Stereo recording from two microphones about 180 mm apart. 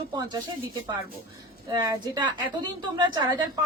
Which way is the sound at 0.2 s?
20° right (ahead or behind).